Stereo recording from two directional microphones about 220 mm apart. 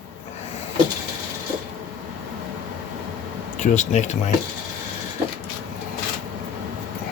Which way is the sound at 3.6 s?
35° left (ahead or behind).